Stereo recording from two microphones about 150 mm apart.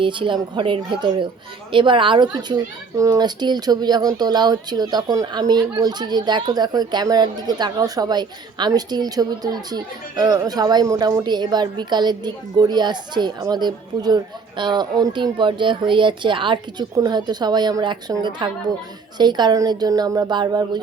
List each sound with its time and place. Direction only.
0.0 s a woman's voice: 35° right (ahead or behind)